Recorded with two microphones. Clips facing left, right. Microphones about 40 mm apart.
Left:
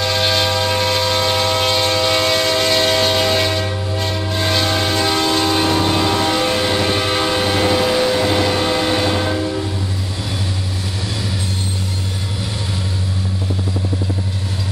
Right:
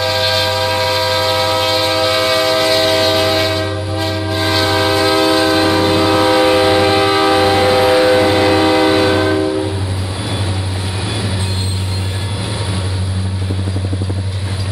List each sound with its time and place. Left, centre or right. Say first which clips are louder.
0.0 s train: right 2 dB; centre
11.1 s train: right 4 dB; centre